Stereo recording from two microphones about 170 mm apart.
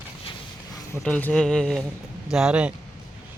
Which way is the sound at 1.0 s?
10° left (ahead or behind).